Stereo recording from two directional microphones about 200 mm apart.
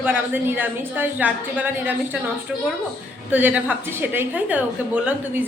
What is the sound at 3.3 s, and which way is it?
A woman's voice, 10° right (ahead or behind).